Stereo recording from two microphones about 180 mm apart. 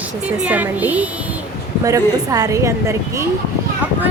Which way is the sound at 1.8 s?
20° right (ahead or behind).